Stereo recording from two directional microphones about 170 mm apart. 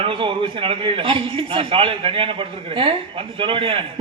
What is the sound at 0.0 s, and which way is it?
A man's voice, 30° right (ahead or behind).